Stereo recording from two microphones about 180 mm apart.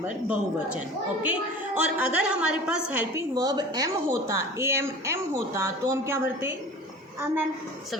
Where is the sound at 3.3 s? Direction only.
20° right (ahead or behind).